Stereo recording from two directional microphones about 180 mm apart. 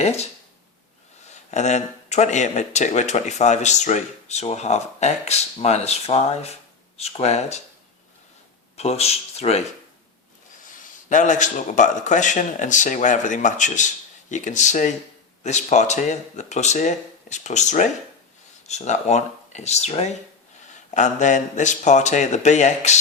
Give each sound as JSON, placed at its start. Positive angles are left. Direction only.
{"t": 0.0, "sound": "speech", "side_deg": 35}
{"t": 1.3, "sound": "speech", "side_deg": 40}
{"t": 8.7, "sound": "speech", "side_deg": 35}
{"t": 11.1, "sound": "speech", "side_deg": 45}